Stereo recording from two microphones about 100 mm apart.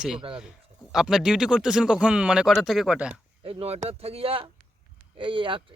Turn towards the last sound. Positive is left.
turn(degrees=-55)  # may be behind; listen again after turning